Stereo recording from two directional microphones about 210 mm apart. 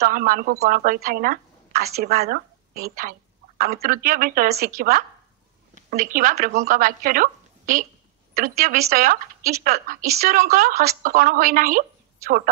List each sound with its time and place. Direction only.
0.0 s a woman's voice: 45° right (ahead or behind)